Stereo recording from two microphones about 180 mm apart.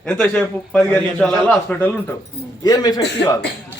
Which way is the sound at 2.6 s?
20° left (ahead or behind).